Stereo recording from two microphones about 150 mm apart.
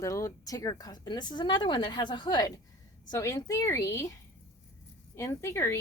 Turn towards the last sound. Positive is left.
turn(degrees=15)  # may be behind; listen again after turning